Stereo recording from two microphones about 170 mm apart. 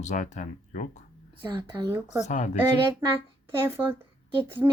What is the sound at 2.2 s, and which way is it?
Speech, 45° left (ahead or behind).